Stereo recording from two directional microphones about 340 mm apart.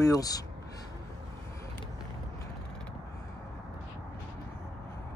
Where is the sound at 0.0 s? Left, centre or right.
Centre.